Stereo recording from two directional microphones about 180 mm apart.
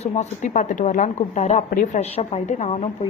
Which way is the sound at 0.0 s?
40° left (ahead or behind).